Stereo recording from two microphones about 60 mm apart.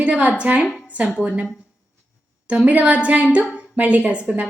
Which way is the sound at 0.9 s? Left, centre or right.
Right.